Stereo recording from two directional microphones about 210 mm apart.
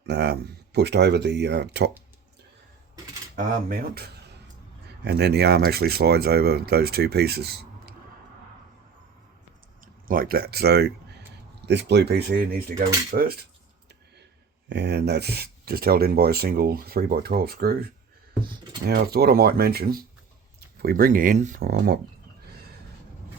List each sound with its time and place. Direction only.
0.0 s speech: 55° right (ahead or behind)
3.3 s speech: 45° right (ahead or behind)
9.8 s speech: 40° right (ahead or behind)
14.7 s speech: 55° right (ahead or behind)